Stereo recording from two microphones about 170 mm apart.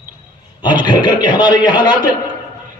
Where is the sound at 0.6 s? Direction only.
25° left (ahead or behind).